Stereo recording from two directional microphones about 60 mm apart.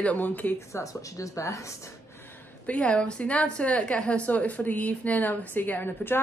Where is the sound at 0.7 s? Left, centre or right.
Left.